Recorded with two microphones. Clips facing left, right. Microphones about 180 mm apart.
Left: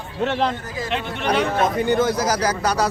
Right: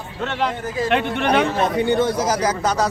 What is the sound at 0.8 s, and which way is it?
Speech, 60° right (ahead or behind).